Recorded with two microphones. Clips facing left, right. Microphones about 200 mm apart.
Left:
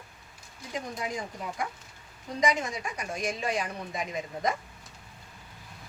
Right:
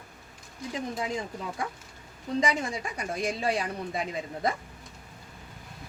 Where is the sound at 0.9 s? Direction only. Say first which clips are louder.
Right 2 dB; 25° right (ahead or behind).